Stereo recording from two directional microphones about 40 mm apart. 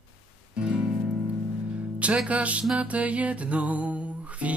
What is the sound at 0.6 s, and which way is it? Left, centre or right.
Music, right.